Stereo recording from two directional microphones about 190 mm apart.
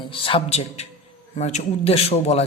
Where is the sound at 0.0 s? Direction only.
30° left (ahead or behind).